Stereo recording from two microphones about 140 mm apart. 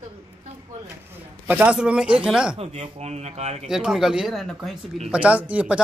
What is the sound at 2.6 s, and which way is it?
Speech, 50° right (ahead or behind).